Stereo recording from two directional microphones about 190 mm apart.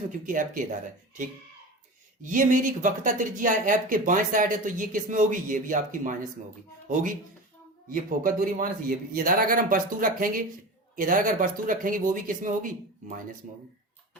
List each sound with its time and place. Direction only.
0.3 s speech: 45° right (ahead or behind)
2.2 s speech: 45° right (ahead or behind)
7.9 s speech: 45° right (ahead or behind)